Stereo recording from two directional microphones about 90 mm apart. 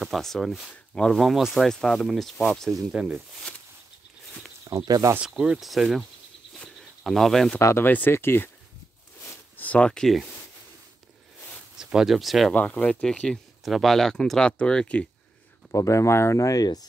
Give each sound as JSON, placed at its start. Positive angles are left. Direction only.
{"t": 0.0, "sound": "speech", "side_deg": 0}
{"t": 2.9, "sound": "speech", "side_deg": -10}
{"t": 4.7, "sound": "speech", "side_deg": -40}
{"t": 5.2, "sound": "speech", "side_deg": -10}
{"t": 6.5, "sound": "a sound", "side_deg": 0}
{"t": 7.6, "sound": "speech", "side_deg": 25}
{"t": 9.6, "sound": "speech", "side_deg": 15}
{"t": 11.8, "sound": "speech", "side_deg": -5}
{"t": 12.5, "sound": "speech", "side_deg": 15}
{"t": 15.7, "sound": "speech", "side_deg": 35}